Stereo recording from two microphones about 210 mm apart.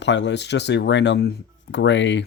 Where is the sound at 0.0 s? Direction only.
55° left (ahead or behind).